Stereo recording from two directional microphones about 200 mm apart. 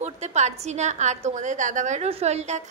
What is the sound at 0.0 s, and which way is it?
A woman's voice, 35° right (ahead or behind).